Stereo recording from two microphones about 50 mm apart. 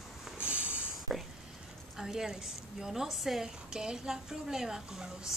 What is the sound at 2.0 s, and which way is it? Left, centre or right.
Speech, centre.